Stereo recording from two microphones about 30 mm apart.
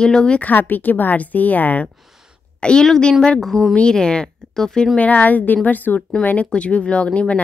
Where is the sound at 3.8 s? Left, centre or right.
Left.